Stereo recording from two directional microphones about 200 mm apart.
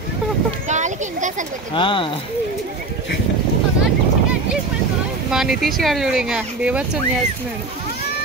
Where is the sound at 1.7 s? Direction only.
25° left (ahead or behind).